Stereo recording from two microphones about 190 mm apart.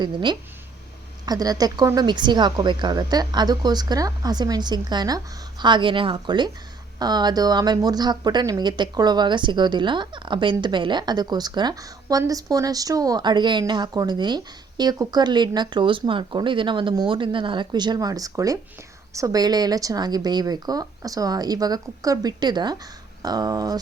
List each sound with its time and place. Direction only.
0.0 s speech: 25° right (ahead or behind)